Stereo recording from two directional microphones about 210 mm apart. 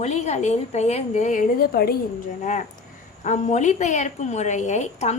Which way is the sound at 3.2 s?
35° left (ahead or behind).